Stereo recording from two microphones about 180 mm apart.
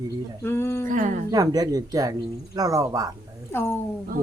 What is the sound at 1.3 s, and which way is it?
Speech, 20° right (ahead or behind).